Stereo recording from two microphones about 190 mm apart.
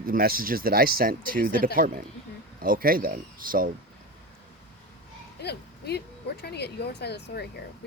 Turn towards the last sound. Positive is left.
turn(degrees=60)  # may be behind; listen again after turning